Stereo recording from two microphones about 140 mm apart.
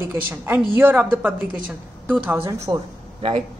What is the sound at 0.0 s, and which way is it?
A woman's voice, 15° right (ahead or behind).